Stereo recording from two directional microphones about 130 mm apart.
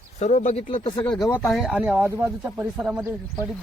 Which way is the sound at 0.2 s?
65° left (ahead or behind).